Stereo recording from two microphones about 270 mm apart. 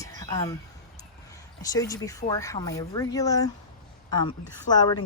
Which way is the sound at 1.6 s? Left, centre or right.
Centre.